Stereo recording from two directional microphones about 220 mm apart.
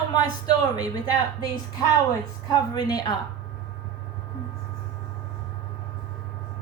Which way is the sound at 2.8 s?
15° left (ahead or behind).